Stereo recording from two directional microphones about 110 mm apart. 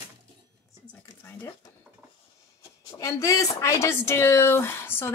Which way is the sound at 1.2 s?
20° left (ahead or behind).